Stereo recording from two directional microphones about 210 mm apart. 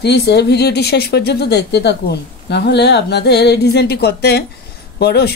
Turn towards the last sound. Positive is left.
turn(degrees=50)  # may be behind; listen again after turning